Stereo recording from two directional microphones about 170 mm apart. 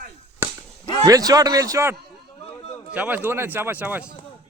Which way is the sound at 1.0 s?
20° right (ahead or behind).